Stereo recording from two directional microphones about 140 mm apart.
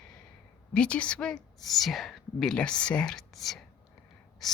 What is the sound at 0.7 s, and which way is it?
A woman's voice, 5° left (ahead or behind).